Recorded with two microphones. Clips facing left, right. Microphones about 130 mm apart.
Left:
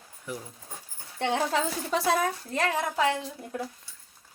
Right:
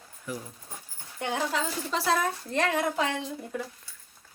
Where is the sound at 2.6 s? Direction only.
Centre (ahead or behind).